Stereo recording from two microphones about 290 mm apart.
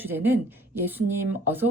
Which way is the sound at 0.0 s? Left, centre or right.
Centre.